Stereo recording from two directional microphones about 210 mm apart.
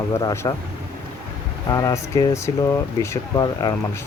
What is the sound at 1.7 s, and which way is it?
Speech, 15° left (ahead or behind).